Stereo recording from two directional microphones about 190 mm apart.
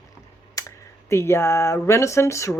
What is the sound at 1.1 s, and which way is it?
Speech, 15° left (ahead or behind).